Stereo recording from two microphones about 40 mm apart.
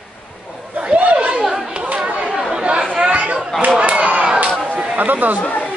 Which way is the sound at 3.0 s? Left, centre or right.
Right.